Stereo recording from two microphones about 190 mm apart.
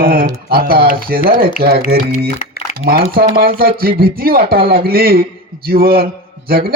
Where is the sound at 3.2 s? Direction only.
55° right (ahead or behind).